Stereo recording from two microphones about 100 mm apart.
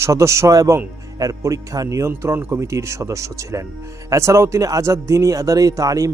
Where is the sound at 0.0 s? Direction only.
30° right (ahead or behind).